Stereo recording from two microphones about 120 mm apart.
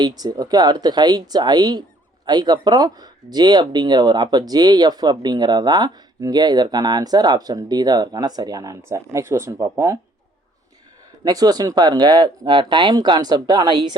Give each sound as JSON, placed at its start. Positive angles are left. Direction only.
{"t": 0.0, "sound": "speech", "side_deg": -35}
{"t": 11.2, "sound": "speech", "side_deg": -30}